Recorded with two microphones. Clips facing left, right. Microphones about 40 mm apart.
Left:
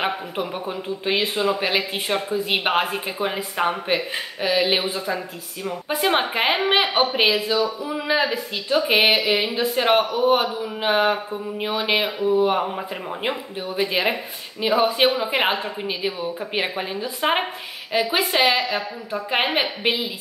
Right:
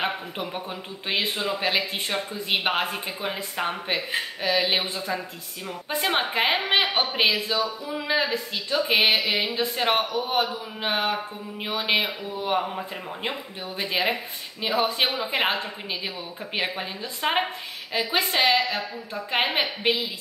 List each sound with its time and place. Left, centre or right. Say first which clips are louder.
0.0 s speech: left 4 dB; centre
4.7 s speech: left 3 dB; left
5.0 s speech: left 3 dB; centre
10.1 s speech: left 6 dB; left